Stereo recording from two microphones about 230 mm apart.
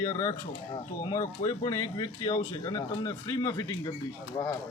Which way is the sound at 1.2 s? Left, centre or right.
Left.